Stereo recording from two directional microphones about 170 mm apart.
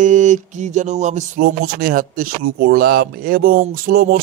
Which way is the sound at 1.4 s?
60° right (ahead or behind).